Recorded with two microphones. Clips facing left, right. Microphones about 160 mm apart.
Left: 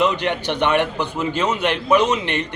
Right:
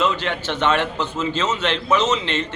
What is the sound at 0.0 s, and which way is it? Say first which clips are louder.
A man's voice: left 2 dB; 15° left (ahead or behind).